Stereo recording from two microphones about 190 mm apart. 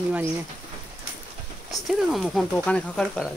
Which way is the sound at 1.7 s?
Centre (ahead or behind).